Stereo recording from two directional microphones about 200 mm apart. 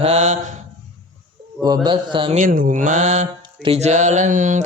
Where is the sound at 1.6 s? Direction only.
20° right (ahead or behind).